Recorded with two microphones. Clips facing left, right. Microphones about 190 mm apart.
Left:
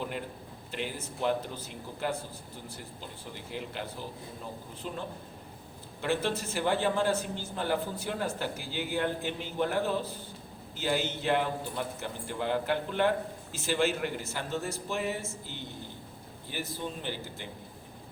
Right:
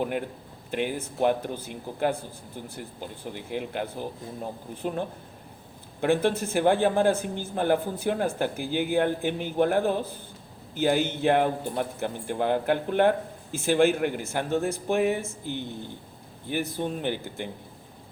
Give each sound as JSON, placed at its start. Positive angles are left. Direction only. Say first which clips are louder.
{"t": 0.7, "sound": "speech", "louder": "right 8 dB", "side_deg": -55}